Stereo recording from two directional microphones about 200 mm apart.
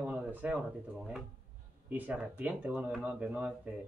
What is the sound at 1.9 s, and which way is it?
Speech, 5° right (ahead or behind).